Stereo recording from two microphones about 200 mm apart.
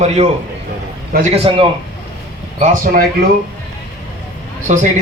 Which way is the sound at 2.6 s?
45° right (ahead or behind).